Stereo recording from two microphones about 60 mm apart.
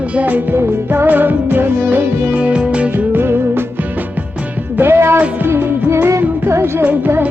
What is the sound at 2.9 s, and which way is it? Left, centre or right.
Music, right.